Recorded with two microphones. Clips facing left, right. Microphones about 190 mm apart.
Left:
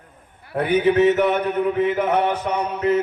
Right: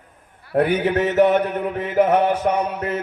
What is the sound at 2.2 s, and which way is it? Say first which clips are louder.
Speech: right 3 dB; 45° right (ahead or behind).